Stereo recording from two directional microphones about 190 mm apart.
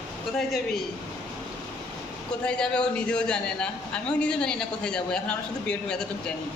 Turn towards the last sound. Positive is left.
turn(degrees=5)  # may be behind; listen again after turning